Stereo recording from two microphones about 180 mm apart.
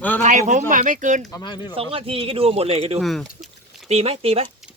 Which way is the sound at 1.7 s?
30° right (ahead or behind).